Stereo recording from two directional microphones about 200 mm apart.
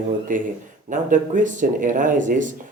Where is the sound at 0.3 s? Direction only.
40° right (ahead or behind).